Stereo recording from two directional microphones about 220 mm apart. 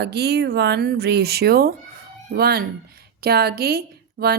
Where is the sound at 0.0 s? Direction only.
50° right (ahead or behind).